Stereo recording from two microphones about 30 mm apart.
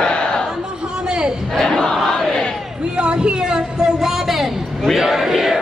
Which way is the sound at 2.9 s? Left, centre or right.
Right.